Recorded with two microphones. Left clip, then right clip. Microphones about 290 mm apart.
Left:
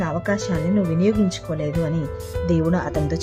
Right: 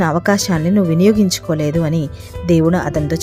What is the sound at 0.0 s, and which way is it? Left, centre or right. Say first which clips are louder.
Speech: right 8 dB; centre.